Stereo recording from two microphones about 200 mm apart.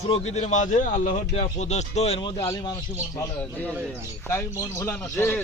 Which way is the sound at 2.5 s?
20° left (ahead or behind).